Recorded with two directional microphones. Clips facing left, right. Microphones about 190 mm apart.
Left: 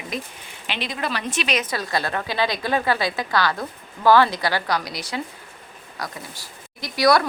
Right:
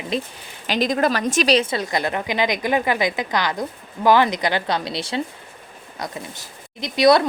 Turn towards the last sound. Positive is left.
turn(degrees=-20)  # may be behind; listen again after turning